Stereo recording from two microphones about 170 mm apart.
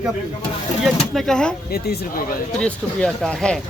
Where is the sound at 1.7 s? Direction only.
70° left (ahead or behind).